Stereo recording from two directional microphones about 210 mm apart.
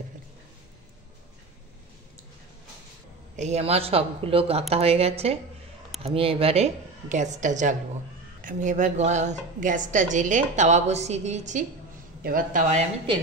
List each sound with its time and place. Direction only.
3.3 s a woman's voice: 30° right (ahead or behind)